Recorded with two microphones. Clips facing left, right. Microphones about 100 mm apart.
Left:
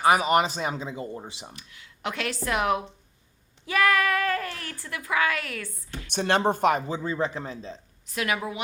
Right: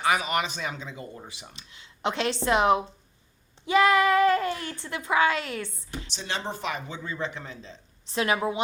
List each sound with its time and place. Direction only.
0.0 s speech: 35° left (ahead or behind)
1.5 s speech: 25° right (ahead or behind)
6.1 s speech: 55° left (ahead or behind)
6.8 s speech: 35° left (ahead or behind)
8.0 s speech: 30° right (ahead or behind)